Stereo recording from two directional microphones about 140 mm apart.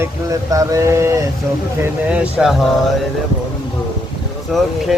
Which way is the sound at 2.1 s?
5° right (ahead or behind).